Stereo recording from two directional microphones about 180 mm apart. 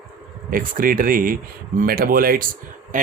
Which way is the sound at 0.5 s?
50° right (ahead or behind).